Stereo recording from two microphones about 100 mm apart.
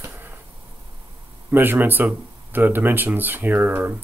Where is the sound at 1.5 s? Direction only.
20° right (ahead or behind).